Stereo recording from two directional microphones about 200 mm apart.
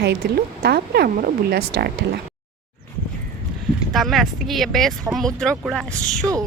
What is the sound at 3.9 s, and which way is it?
Speech, centre (ahead or behind).